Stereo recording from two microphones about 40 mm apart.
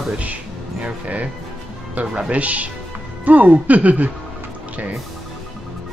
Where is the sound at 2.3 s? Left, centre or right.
Right.